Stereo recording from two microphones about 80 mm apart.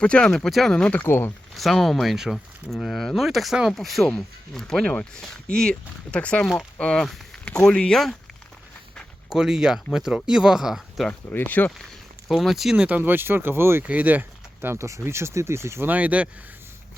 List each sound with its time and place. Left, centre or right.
0.0 s speech: centre
1.0 s speech: left
1.5 s speech: centre
9.3 s speech: centre
11.1 s speech: left
12.3 s speech: centre
12.7 s speech: centre
13.8 s speech: centre; by 15.9 s right
15.9 s speech: centre